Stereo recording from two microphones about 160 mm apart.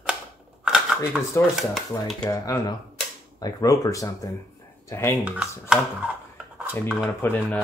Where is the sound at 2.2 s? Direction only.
20° left (ahead or behind).